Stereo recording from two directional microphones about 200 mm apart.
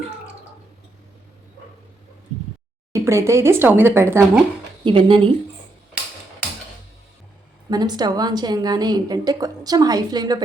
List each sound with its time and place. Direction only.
2.9 s speech: 15° right (ahead or behind)
4.8 s a woman's voice: 25° right (ahead or behind)
7.7 s a woman's voice: 20° right (ahead or behind)